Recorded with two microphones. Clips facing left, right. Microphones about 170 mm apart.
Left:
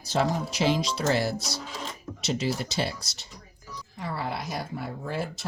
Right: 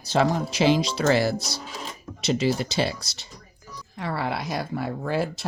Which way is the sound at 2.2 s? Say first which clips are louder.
Right 5 dB; 70° right (ahead or behind).